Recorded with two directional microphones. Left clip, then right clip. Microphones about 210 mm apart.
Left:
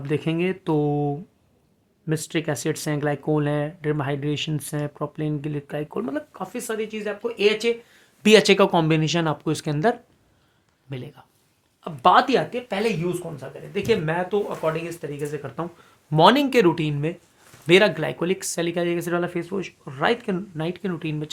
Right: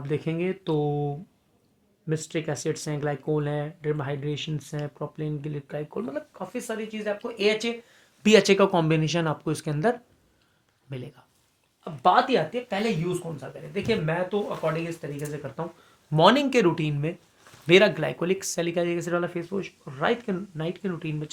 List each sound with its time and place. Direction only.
0.0 s speech: 25° left (ahead or behind)
8.2 s speech: 25° left (ahead or behind)
11.8 s speech: 35° left (ahead or behind)
13.7 s speech: 45° left (ahead or behind)
16.0 s speech: 20° left (ahead or behind)